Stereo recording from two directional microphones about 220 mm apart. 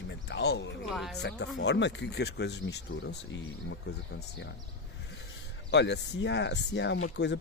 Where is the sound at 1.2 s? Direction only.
50° left (ahead or behind).